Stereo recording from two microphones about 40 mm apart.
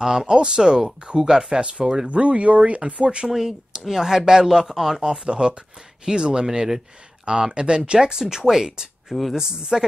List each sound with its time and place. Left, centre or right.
0.0 s speech: centre
1.6 s speech: right
3.3 s speech: centre
5.2 s speech: right